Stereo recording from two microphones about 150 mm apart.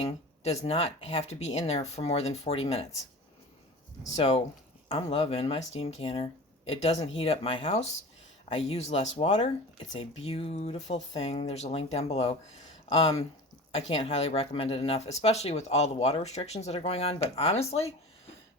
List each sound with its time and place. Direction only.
0.0 s speech: 40° left (ahead or behind)
4.1 s speech: 40° left (ahead or behind)